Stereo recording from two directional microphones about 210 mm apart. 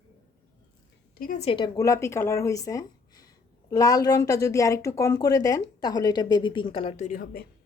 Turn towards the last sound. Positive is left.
turn(degrees=40)  # may be behind; listen again after turning